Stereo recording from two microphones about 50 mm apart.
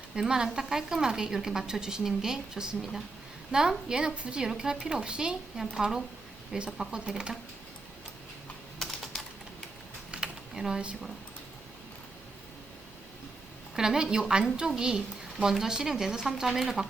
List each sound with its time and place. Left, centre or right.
0.2 s a woman's voice: centre
8.8 s typing: centre
10.1 s computer keyboard: centre
13.7 s a woman's voice: centre